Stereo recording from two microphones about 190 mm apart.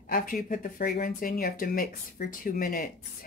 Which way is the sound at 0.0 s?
45° left (ahead or behind).